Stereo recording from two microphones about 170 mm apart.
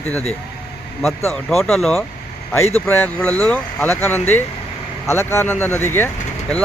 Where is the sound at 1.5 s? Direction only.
Centre (ahead or behind).